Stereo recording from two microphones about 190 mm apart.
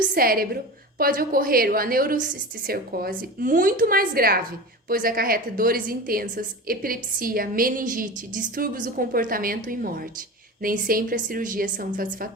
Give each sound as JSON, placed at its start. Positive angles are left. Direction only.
{"t": 0.0, "sound": "a woman's voice", "side_deg": -50}